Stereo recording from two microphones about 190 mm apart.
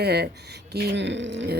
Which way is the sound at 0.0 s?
60° right (ahead or behind).